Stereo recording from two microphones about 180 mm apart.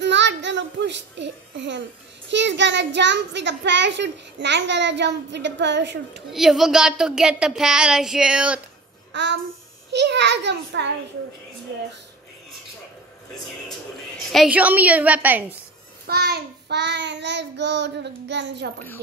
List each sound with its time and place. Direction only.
0.0 s a sound: 80° right
2.2 s a child's voice: 80° right
6.3 s speech: centre (ahead or behind)
9.1 s babbling: 75° right (ahead or behind)
9.8 s a child's voice: 70° right (ahead or behind)
14.3 s a woman's voice: 5° right (ahead or behind)
16.1 s a child's voice: 60° right (ahead or behind)